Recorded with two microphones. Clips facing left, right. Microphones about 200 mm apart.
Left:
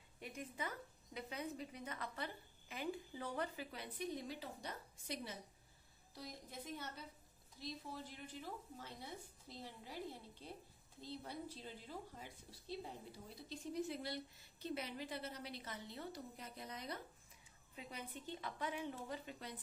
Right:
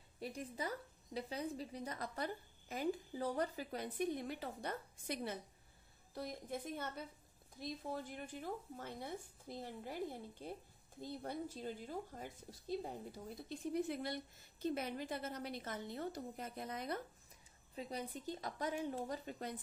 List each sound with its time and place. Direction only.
0.2 s a woman's voice: 35° right (ahead or behind); by 17.0 s 50° right (ahead or behind)
17.7 s a woman's voice: 40° right (ahead or behind)